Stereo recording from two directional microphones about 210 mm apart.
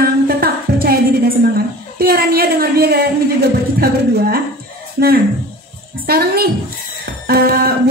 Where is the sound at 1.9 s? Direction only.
45° right (ahead or behind).